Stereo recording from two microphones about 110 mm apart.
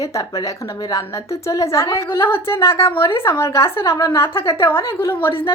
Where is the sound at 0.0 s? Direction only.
30° left (ahead or behind).